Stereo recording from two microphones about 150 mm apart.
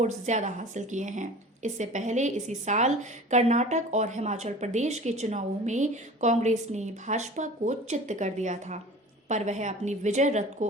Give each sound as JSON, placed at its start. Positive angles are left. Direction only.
{"t": 0.0, "sound": "a woman's voice", "side_deg": -50}